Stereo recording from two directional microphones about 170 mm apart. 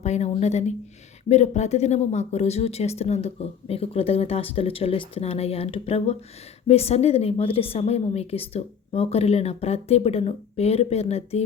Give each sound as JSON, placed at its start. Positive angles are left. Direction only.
{"t": 0.0, "sound": "speech", "side_deg": 40}